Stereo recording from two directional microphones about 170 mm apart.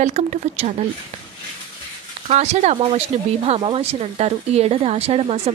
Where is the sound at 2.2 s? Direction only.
40° right (ahead or behind).